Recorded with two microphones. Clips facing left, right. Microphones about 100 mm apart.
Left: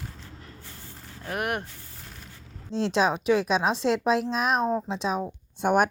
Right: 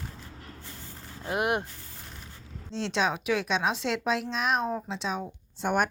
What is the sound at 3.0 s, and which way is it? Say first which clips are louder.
Speech: left 4 dB; 35° left (ahead or behind).